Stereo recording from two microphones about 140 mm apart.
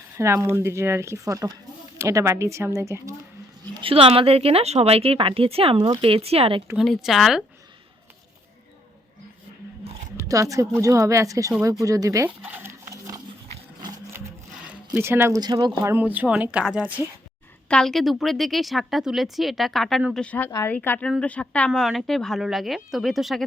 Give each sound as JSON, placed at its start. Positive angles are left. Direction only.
{"t": 0.2, "sound": "a woman's voice", "side_deg": -20}
{"t": 3.8, "sound": "speech", "side_deg": -40}
{"t": 6.7, "sound": "a woman's voice", "side_deg": 0}
{"t": 10.2, "sound": "a woman's voice", "side_deg": -25}
{"t": 11.6, "sound": "a sound", "side_deg": -25}
{"t": 14.9, "sound": "speech", "side_deg": -15}
{"t": 15.4, "sound": "a woman's voice", "side_deg": -30}
{"t": 15.8, "sound": "speech", "side_deg": -15}
{"t": 17.7, "sound": "a woman's voice", "side_deg": 5}